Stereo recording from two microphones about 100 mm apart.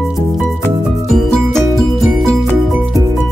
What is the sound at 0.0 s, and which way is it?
Music, centre (ahead or behind).